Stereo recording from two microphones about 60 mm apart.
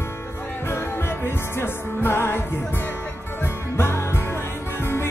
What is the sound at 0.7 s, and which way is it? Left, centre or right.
Music, left.